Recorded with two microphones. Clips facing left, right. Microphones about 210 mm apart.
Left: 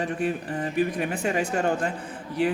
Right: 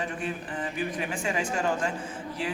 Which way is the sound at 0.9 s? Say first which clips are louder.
Left 4 dB; 60° left (ahead or behind).